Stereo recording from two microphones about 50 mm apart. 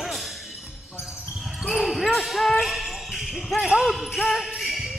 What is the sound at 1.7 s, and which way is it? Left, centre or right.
Basketball bounce, centre.